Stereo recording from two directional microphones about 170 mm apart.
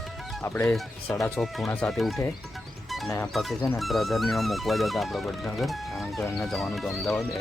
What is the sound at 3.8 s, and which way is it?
Speech, centre (ahead or behind).